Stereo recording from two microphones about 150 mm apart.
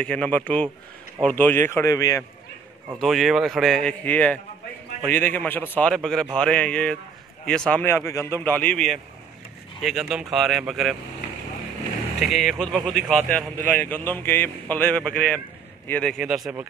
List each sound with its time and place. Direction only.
0.0 s speech: 5° left (ahead or behind)
3.0 s a man's voice: centre (ahead or behind)
7.8 s a man's voice: 15° left (ahead or behind); by 11.0 s 5° right (ahead or behind)
12.2 s a man's voice: centre (ahead or behind)
16.2 s a man's voice: 5° right (ahead or behind)